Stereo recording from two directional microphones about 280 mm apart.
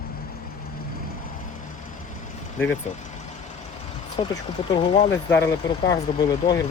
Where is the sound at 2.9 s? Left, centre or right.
Left.